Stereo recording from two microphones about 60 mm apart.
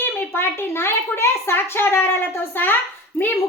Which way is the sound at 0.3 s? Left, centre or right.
Left.